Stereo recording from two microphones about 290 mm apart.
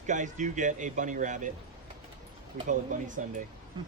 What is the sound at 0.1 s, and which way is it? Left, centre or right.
A man's voice, right.